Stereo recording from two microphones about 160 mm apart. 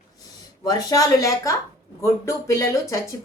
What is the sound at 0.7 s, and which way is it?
Speech, 20° left (ahead or behind).